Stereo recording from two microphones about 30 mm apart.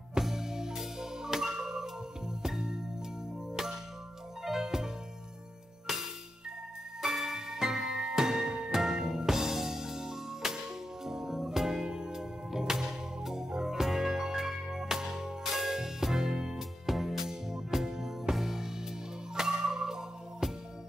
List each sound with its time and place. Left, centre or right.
0.2 s music: centre
3.5 s music: centre
12.2 s organ: centre
13.7 s music: centre
16.8 s music: centre